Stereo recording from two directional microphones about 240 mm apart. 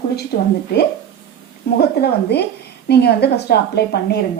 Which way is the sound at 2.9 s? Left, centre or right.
Left.